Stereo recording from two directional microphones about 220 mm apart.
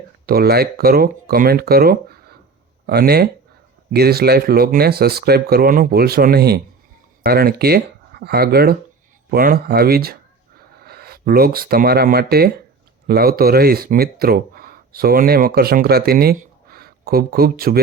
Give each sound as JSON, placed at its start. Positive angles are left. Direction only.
{"t": 0.3, "sound": "speech", "side_deg": -45}